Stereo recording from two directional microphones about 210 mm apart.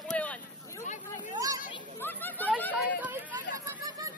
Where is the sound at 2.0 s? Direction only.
10° left (ahead or behind).